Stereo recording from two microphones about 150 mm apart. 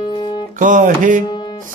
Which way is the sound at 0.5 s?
60° right (ahead or behind).